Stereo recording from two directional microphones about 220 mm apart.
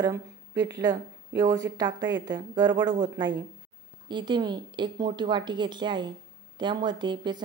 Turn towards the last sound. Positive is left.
turn(degrees=-20)  # may be behind; listen again after turning